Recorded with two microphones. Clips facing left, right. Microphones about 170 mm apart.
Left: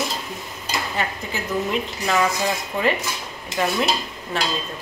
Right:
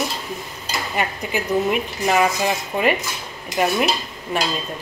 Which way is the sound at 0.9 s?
15° right (ahead or behind).